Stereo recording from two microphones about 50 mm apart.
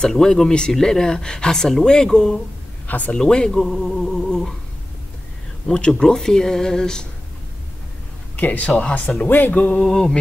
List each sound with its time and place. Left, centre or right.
0.1 s speech: centre
2.9 s speech: left
3.2 s speech: centre
5.7 s speech: centre
8.4 s speech: left
9.8 s speech: centre